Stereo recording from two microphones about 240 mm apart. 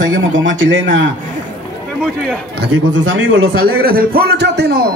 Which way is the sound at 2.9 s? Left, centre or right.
Right.